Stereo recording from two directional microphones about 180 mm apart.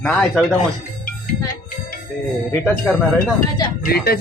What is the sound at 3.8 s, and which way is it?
Speech, 60° left (ahead or behind).